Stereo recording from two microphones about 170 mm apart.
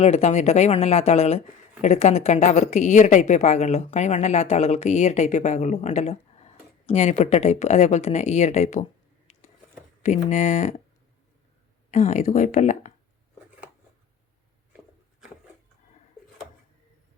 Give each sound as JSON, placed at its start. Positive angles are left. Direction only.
{"t": 0.0, "sound": "a woman's voice", "side_deg": 40}
{"t": 11.9, "sound": "speech", "side_deg": 45}